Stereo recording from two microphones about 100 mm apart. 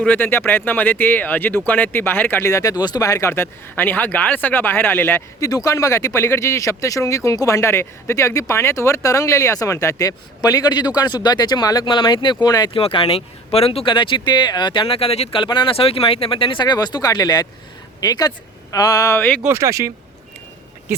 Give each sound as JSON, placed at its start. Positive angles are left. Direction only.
{"t": 0.0, "sound": "speech", "side_deg": 15}
{"t": 2.7, "sound": "speech", "side_deg": 45}
{"t": 5.4, "sound": "speech", "side_deg": 35}
{"t": 12.7, "sound": "speech", "side_deg": 60}
{"t": 15.4, "sound": "speech", "side_deg": 55}
{"t": 19.5, "sound": "speech", "side_deg": -30}